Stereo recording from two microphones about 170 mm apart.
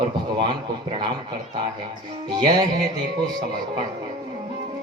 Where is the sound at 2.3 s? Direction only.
25° right (ahead or behind).